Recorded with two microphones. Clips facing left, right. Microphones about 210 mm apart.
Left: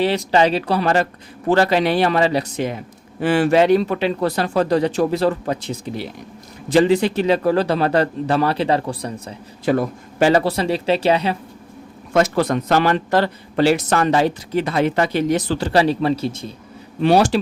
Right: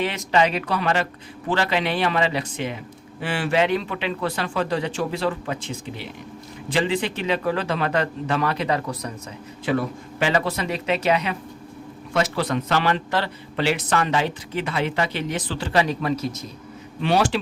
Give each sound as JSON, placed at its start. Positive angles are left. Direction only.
{"t": 0.0, "sound": "a man's voice", "side_deg": 35}
{"t": 12.1, "sound": "a man's voice", "side_deg": 50}